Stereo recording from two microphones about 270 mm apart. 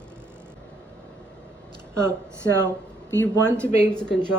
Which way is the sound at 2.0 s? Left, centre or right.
Centre.